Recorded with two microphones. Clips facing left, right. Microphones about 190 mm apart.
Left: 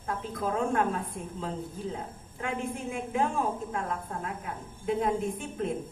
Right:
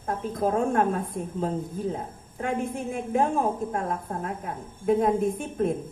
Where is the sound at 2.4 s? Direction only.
45° right (ahead or behind).